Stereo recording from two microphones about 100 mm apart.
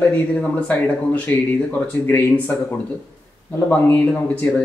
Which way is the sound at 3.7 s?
20° left (ahead or behind).